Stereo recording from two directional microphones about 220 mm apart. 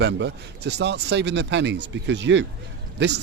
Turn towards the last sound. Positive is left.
turn(degrees=-55)  # may be behind; listen again after turning